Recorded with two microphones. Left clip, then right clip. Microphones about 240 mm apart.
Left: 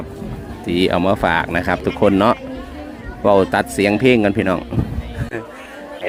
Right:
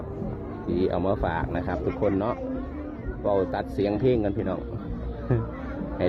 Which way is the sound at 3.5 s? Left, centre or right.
Left.